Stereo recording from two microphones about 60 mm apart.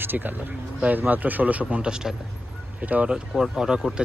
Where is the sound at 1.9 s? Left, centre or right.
Centre.